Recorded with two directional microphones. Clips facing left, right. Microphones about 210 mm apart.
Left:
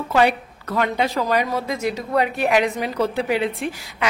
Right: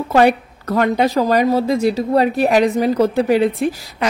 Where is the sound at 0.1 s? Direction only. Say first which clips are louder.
Right 5 dB; 45° right (ahead or behind).